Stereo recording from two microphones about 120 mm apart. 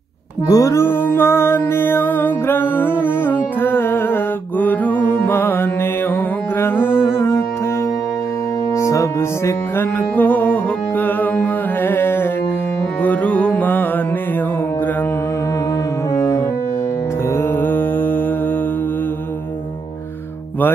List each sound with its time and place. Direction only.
0.5 s music: 25° left (ahead or behind)
8.7 s music: 25° left (ahead or behind)
9.8 s music: 15° left (ahead or behind)